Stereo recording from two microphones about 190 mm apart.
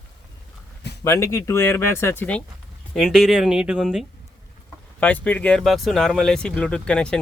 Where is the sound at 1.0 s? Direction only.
15° left (ahead or behind).